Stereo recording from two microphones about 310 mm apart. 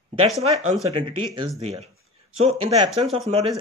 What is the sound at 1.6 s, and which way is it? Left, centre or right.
Speech, centre.